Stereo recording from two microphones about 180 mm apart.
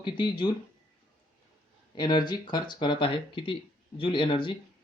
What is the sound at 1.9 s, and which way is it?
Speech, 25° left (ahead or behind).